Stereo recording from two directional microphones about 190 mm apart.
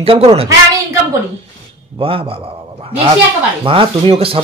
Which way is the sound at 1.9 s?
30° right (ahead or behind).